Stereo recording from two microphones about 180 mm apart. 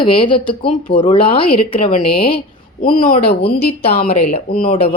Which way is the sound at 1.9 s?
50° left (ahead or behind).